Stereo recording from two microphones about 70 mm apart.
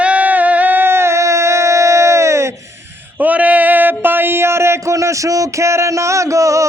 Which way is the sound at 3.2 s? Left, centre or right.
Right.